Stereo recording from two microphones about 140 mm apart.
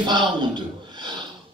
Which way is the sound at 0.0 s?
30° right (ahead or behind).